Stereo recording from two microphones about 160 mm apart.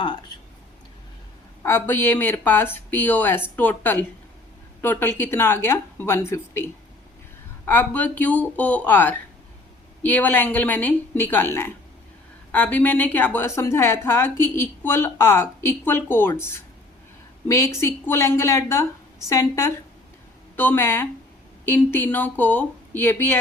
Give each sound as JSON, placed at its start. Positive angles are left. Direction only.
{"t": 1.6, "sound": "a woman's voice", "side_deg": 15}